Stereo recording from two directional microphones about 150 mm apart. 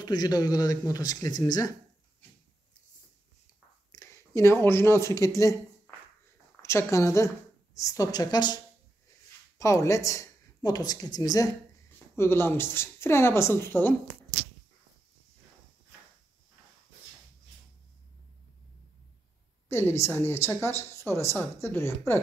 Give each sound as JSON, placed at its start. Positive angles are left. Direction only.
{"t": 0.0, "sound": "speech", "side_deg": 25}
{"t": 3.9, "sound": "a woman's voice", "side_deg": 20}
{"t": 9.6, "sound": "a woman's voice", "side_deg": 20}
{"t": 19.7, "sound": "a woman's voice", "side_deg": 15}